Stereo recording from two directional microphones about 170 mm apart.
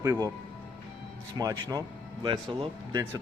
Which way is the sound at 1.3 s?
20° right (ahead or behind).